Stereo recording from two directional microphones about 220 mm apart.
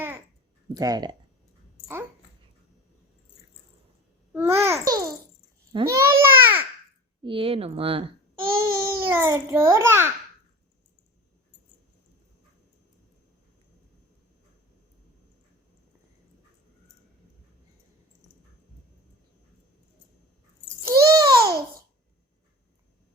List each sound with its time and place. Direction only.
0.8 s speech: 15° right (ahead or behind)
4.3 s babbling: 10° right (ahead or behind)
7.3 s speech: 25° right (ahead or behind)
8.4 s baby cry: 40° right (ahead or behind)
8.8 s a child's voice: 15° right (ahead or behind)
20.8 s a sound: 15° right (ahead or behind)